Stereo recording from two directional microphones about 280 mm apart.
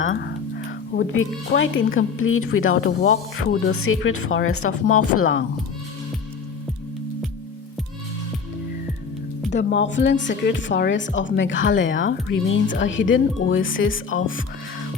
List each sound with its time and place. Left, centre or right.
0.0 s music: left
2.0 s speech: left
9.5 s speech: left